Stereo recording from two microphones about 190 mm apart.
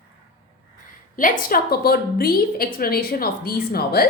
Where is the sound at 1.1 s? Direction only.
45° left (ahead or behind).